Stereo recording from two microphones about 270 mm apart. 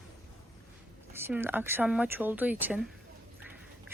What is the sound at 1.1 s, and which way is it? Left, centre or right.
Speech, centre.